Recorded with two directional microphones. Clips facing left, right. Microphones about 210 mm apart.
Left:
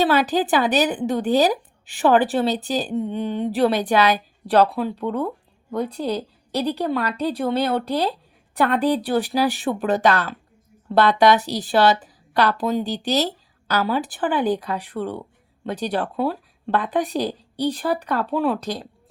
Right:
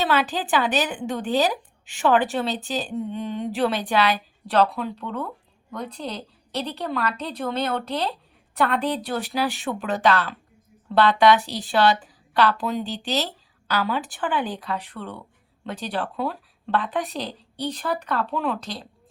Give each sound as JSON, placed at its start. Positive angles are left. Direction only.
{"t": 0.0, "sound": "a woman's voice", "side_deg": 40}
{"t": 5.9, "sound": "speech", "side_deg": 10}
{"t": 6.7, "sound": "a woman's voice", "side_deg": 35}